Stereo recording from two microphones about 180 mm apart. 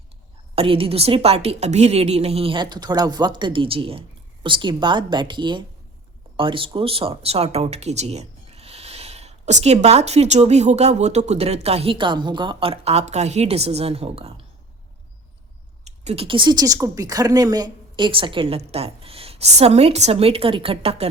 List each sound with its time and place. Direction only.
0.5 s speech: 30° right (ahead or behind)
15.8 s speech: 35° right (ahead or behind)